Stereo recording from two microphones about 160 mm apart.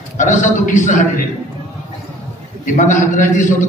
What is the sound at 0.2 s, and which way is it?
A man's voice, 50° left (ahead or behind).